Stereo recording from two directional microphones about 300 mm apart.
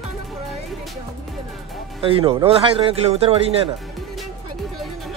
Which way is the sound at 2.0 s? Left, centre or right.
Centre.